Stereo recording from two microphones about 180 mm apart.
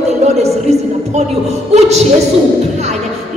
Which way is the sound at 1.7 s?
40° right (ahead or behind).